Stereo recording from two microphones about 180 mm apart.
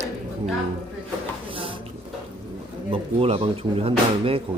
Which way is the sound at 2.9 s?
30° right (ahead or behind).